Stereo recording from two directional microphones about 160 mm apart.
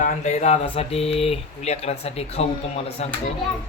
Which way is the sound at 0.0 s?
50° left (ahead or behind).